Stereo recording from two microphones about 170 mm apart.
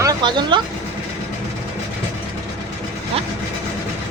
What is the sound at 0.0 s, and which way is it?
Speech, 25° right (ahead or behind).